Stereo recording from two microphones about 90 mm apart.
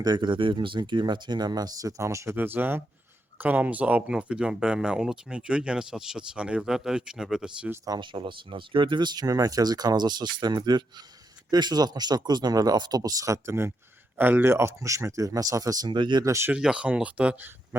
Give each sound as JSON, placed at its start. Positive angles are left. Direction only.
{"t": 0.0, "sound": "speech", "side_deg": -55}
{"t": 7.9, "sound": "speech", "side_deg": -55}
{"t": 15.9, "sound": "speech", "side_deg": -60}
{"t": 16.2, "sound": "speech", "side_deg": -35}
{"t": 16.5, "sound": "speech", "side_deg": -10}